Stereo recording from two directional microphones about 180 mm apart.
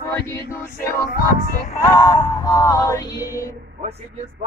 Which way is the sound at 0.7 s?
55° left (ahead or behind).